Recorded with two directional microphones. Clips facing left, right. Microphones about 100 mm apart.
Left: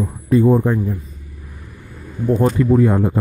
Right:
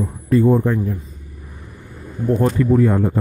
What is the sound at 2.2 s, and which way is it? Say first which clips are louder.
Speech: left 1 dB; 20° left (ahead or behind).